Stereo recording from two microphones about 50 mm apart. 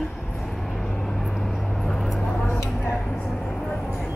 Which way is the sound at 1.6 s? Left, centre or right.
Centre.